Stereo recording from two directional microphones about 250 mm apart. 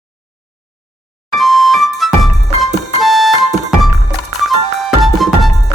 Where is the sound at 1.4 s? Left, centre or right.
Centre.